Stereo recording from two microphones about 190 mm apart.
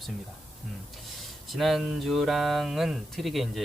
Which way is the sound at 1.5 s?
Centre (ahead or behind).